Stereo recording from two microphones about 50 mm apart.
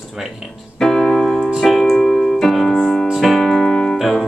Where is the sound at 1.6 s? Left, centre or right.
Centre.